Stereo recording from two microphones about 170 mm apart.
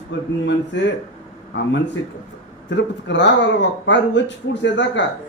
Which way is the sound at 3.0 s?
90° left.